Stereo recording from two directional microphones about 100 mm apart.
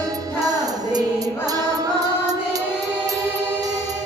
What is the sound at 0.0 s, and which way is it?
Music, 40° right (ahead or behind).